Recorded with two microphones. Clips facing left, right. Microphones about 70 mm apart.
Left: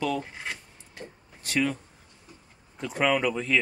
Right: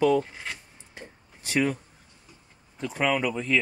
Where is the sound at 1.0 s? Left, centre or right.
Centre.